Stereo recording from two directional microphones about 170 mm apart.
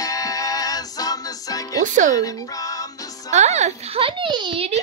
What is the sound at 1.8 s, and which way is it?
Speech, 50° right (ahead or behind).